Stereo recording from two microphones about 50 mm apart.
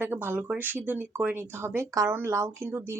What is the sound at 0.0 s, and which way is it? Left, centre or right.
Speech, right.